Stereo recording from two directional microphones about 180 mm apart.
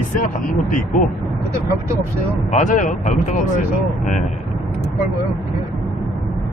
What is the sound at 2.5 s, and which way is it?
Speech, 45° left (ahead or behind).